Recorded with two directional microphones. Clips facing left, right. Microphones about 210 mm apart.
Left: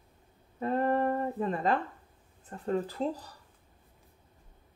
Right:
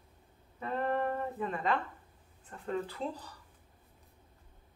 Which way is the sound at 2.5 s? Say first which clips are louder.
Left 5 dB; 40° left (ahead or behind).